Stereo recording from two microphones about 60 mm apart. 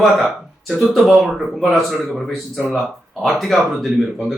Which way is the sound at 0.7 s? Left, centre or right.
Centre.